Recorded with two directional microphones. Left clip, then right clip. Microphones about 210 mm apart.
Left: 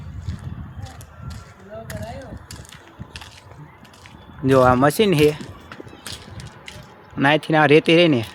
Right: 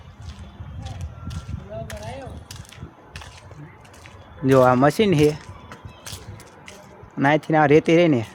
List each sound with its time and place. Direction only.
1.7 s a sound: 30° right (ahead or behind)
4.4 s speech: 5° left (ahead or behind)
7.2 s speech: centre (ahead or behind)